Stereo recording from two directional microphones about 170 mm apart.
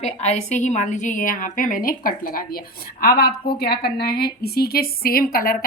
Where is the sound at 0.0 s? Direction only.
40° left (ahead or behind).